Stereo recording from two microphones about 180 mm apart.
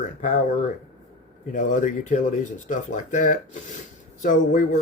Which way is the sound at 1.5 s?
45° left (ahead or behind).